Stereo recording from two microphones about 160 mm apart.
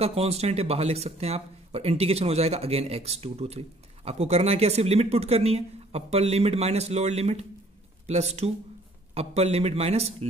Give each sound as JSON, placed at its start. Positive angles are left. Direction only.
{"t": 0.0, "sound": "speech", "side_deg": -40}